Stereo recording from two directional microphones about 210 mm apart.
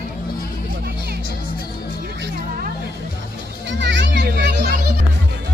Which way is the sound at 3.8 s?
55° right (ahead or behind).